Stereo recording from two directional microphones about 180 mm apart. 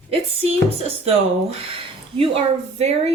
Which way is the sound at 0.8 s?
35° right (ahead or behind).